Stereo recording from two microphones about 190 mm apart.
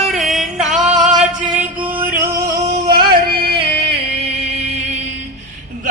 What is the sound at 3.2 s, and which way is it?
Music, 55° right (ahead or behind).